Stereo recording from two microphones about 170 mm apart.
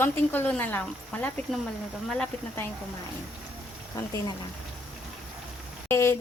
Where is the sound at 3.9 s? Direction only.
20° left (ahead or behind).